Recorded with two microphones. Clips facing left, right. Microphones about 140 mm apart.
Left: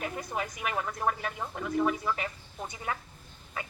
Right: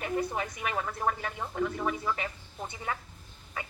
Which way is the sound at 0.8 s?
5° left (ahead or behind).